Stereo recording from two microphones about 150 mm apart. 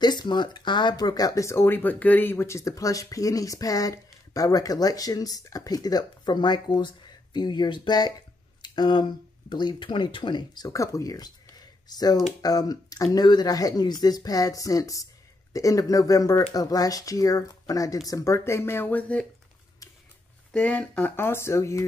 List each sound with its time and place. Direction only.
0.0 s speech: 30° left (ahead or behind); by 19.2 s 10° left (ahead or behind)
20.5 s speech: 5° left (ahead or behind)